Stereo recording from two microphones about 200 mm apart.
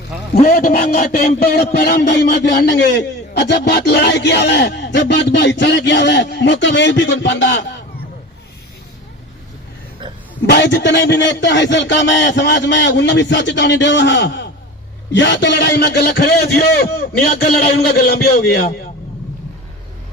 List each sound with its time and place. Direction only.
0.4 s speech: 50° left (ahead or behind); by 7.6 s 65° left (ahead or behind)
10.4 s a man's voice: 60° left (ahead or behind)